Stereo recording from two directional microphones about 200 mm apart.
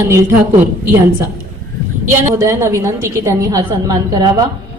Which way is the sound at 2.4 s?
15° right (ahead or behind).